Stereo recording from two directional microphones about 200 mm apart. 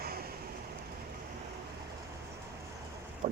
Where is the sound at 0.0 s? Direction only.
50° right (ahead or behind).